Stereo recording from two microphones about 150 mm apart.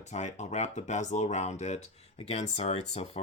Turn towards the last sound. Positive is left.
turn(degrees=45)  # may be behind; listen again after turning